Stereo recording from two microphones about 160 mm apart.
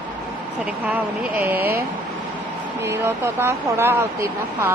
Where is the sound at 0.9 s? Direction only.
10° right (ahead or behind).